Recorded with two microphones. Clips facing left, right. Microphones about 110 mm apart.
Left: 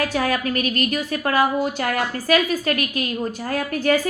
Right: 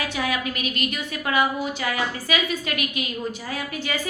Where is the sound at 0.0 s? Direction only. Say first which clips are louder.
Left 5 dB; 45° left (ahead or behind).